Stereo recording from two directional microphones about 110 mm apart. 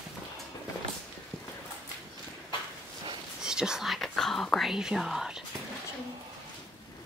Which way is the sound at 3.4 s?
5° right (ahead or behind).